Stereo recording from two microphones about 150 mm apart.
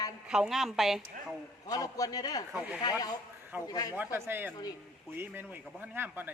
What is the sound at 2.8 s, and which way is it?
A man's voice, 25° left (ahead or behind).